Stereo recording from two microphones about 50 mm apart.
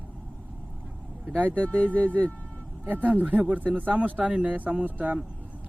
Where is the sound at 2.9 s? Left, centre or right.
Right.